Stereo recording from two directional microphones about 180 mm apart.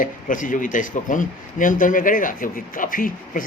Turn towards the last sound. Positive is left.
turn(degrees=50)  # may be behind; listen again after turning